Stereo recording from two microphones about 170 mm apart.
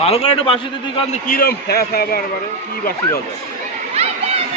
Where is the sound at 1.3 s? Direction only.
65° left (ahead or behind).